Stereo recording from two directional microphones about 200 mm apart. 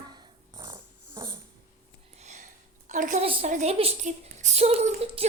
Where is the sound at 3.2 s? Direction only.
35° right (ahead or behind).